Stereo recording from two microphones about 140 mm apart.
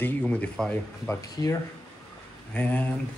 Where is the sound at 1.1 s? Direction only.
25° left (ahead or behind).